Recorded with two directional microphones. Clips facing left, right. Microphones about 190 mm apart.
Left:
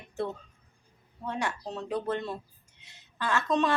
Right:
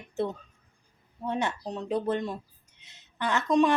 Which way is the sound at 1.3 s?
20° right (ahead or behind).